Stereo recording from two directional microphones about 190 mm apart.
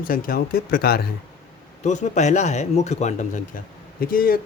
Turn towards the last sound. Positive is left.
turn(degrees=50)  # may be behind; listen again after turning